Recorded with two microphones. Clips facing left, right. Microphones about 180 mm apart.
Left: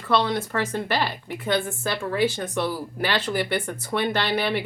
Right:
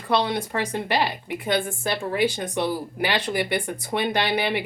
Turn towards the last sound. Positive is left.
turn(degrees=-15)  # may be behind; listen again after turning